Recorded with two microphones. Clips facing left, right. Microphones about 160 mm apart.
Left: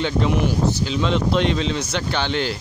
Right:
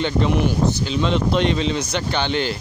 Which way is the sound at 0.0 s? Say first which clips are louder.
Right 1 dB; centre (ahead or behind).